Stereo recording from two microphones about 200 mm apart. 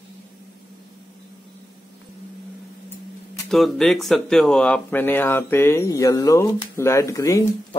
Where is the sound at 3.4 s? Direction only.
Centre (ahead or behind).